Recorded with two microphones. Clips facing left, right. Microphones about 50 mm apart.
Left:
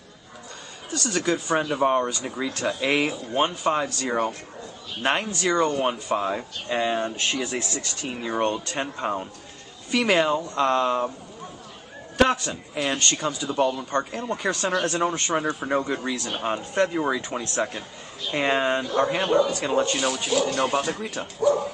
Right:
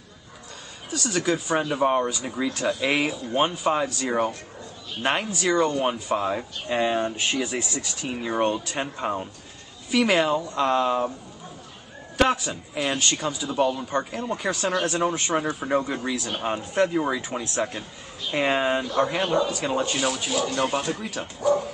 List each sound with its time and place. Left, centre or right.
0.8 s speech: centre
12.2 s speech: centre